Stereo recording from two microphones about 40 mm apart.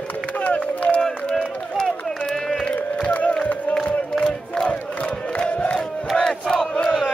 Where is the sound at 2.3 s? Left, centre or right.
Centre.